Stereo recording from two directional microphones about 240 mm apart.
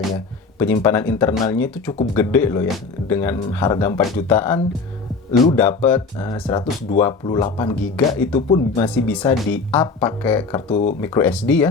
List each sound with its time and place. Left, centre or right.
0.6 s speech: centre
7.8 s speech: centre
8.4 s speech: left
10.7 s speech: left
11.0 s speech: centre